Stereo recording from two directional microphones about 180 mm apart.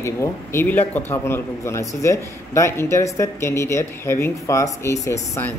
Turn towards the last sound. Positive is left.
turn(degrees=15)  # may be behind; listen again after turning